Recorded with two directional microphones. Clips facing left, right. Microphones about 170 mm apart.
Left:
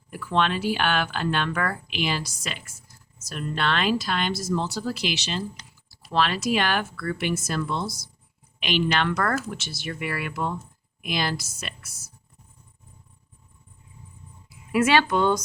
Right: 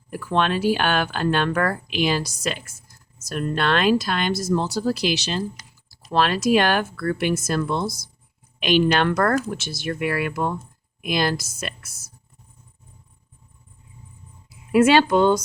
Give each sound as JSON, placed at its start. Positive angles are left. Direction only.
{"t": 0.1, "sound": "speech", "side_deg": -45}
{"t": 14.7, "sound": "speech", "side_deg": -25}